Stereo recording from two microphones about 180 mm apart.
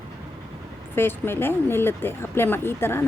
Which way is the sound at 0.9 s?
10° left (ahead or behind).